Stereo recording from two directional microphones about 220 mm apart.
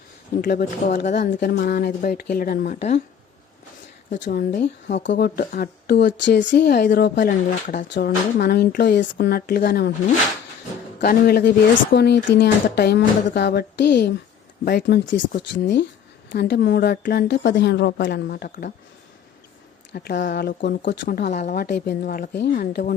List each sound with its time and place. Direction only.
0.4 s speech: 35° left (ahead or behind)
1.3 s speech: 45° left (ahead or behind)
4.2 s speech: 45° left (ahead or behind)
7.9 s speech: 50° left (ahead or behind)
11.0 s speech: 45° left (ahead or behind)
19.9 s speech: 45° left (ahead or behind)